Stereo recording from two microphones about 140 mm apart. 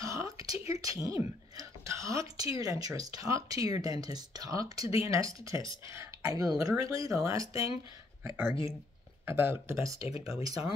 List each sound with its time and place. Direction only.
0.0 s a sound: 20° right (ahead or behind)
0.7 s speech: 25° right (ahead or behind)
9.9 s speech: 45° left (ahead or behind)